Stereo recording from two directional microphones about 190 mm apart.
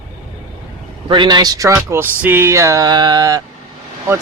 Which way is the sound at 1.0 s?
20° right (ahead or behind).